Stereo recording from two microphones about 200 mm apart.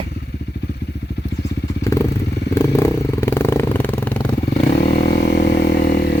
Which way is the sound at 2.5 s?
10° left (ahead or behind).